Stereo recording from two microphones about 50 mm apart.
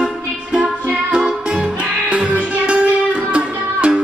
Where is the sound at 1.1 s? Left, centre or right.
Centre.